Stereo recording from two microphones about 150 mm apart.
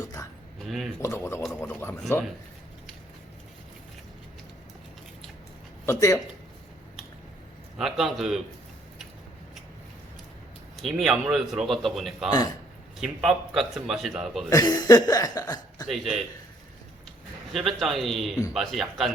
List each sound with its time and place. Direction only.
0.0 s a sound: 25° left (ahead or behind)
0.6 s speech: centre (ahead or behind)
1.0 s speech: 20° left (ahead or behind)
5.8 s speech: 15° left (ahead or behind)
7.8 s speech: centre (ahead or behind)
10.8 s speech: centre (ahead or behind)
14.5 s speech: 25° left (ahead or behind)
15.9 s speech: centre (ahead or behind)
17.5 s speech: centre (ahead or behind)